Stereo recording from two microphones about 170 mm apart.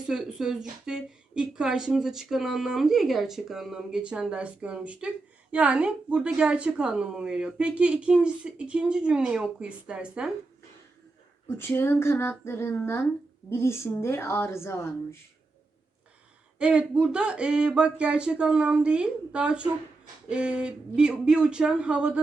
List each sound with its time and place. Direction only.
0.1 s a woman's voice: 5° right (ahead or behind)
11.4 s speech: 15° left (ahead or behind)
16.6 s a woman's voice: 5° right (ahead or behind)